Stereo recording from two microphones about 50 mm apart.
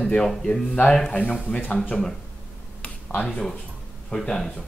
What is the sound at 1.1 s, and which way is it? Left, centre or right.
Speech, left.